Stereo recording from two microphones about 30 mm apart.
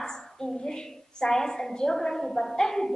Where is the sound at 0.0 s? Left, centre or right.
Centre.